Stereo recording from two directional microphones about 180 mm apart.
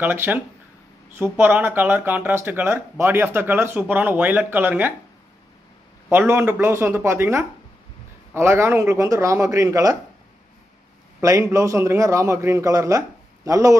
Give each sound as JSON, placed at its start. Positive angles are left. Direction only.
{"t": 0.0, "sound": "speech", "side_deg": -10}
{"t": 6.0, "sound": "speech", "side_deg": -10}
{"t": 11.1, "sound": "speech", "side_deg": -15}